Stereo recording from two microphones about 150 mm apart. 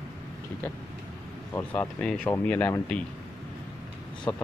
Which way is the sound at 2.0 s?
10° left (ahead or behind).